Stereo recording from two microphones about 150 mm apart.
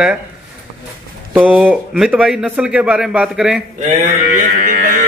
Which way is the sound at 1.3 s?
10° right (ahead or behind).